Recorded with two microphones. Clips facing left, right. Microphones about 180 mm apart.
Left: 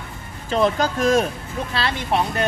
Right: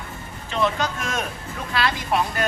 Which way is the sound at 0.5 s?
35° left (ahead or behind).